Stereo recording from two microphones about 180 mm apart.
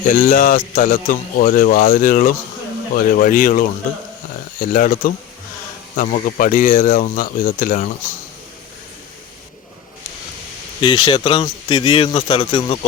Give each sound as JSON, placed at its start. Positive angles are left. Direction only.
{"t": 0.1, "sound": "a man's voice", "side_deg": 45}
{"t": 10.8, "sound": "speech", "side_deg": 25}